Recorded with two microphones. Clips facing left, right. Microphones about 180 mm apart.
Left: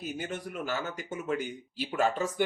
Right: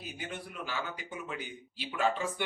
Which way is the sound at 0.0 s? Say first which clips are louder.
Left 6 dB; 45° left (ahead or behind).